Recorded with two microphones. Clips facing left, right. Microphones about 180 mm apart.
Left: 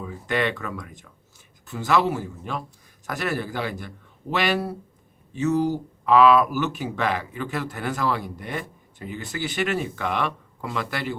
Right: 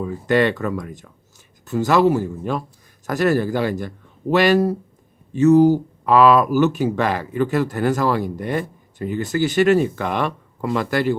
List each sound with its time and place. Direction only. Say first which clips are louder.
0.0 s speech: right 8 dB; 40° right (ahead or behind)